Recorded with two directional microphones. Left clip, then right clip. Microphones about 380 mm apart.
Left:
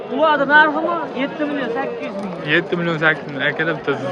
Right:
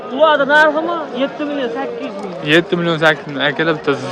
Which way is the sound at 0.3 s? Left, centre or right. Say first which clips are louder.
Right 1 dB; centre.